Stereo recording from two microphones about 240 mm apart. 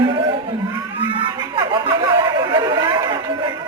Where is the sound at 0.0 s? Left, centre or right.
Right.